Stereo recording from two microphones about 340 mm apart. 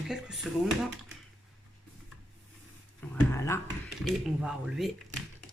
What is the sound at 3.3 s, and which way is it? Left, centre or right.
Speech, centre.